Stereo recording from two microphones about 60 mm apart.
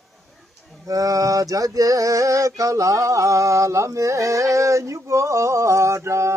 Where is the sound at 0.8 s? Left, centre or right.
Right.